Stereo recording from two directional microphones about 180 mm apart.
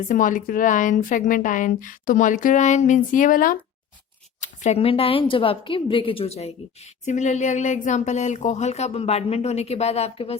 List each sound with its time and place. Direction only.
0.0 s a woman's voice: 50° left (ahead or behind)
4.4 s a woman's voice: 40° left (ahead or behind)